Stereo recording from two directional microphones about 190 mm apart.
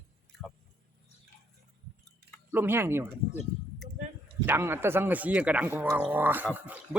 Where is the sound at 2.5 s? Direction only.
10° right (ahead or behind).